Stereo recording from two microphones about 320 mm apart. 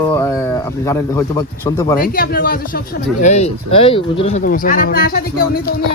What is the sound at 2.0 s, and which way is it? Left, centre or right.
Speech, left.